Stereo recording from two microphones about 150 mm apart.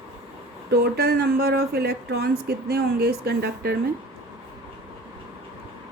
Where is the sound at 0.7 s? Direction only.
90° right.